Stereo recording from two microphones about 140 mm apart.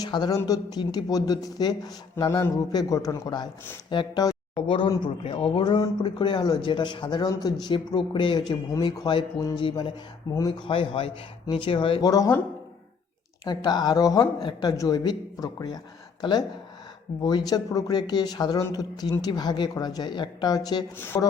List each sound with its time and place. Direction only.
0.0 s speech: 30° left (ahead or behind)
4.5 s speech: 40° left (ahead or behind)
10.3 s speech: 25° left (ahead or behind)
10.7 s speech: 40° left (ahead or behind)
12.0 s speech: 25° left (ahead or behind)
13.4 s speech: 30° left (ahead or behind)
17.2 s speech: 30° left (ahead or behind)
20.9 s speech: 15° left (ahead or behind)